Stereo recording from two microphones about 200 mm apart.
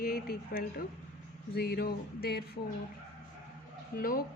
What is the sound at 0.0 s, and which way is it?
A woman's voice, 50° left (ahead or behind).